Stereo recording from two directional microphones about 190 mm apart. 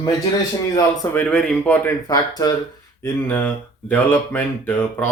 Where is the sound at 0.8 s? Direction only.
10° left (ahead or behind).